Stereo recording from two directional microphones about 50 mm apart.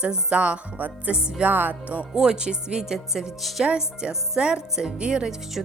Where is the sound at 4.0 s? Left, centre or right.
Centre.